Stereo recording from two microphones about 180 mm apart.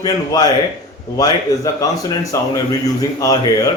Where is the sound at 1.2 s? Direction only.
20° left (ahead or behind).